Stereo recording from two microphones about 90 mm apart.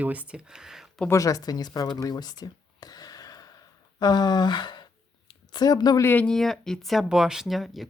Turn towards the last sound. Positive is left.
turn(degrees=0)  # may be behind; listen again after turning